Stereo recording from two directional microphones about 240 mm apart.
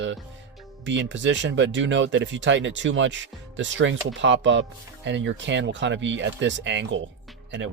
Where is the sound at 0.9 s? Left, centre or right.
Right.